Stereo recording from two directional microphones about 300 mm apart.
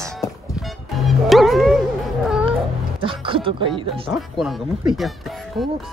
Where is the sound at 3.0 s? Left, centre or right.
Centre.